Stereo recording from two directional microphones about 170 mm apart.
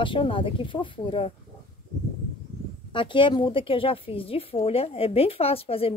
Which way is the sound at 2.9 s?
30° left (ahead or behind).